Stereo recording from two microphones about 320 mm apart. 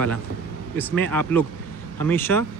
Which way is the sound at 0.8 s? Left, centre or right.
Centre.